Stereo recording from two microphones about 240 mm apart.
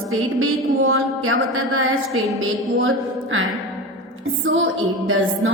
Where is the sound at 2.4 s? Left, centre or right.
Right.